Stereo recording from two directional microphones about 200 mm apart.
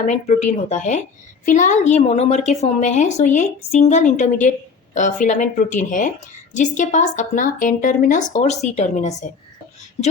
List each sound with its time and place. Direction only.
0.0 s a woman's voice: 35° left (ahead or behind)